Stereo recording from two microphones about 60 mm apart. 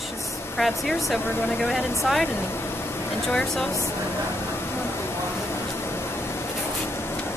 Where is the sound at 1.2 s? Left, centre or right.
Left.